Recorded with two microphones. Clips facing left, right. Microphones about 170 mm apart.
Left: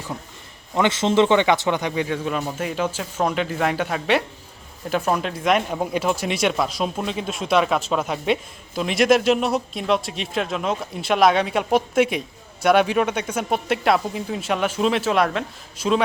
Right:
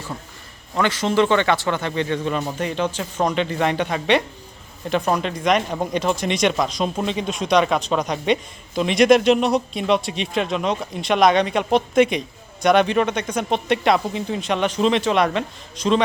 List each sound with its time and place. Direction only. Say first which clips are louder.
0.7 s speech: left 1 dB; 20° left (ahead or behind); by 16.0 s 5° left (ahead or behind)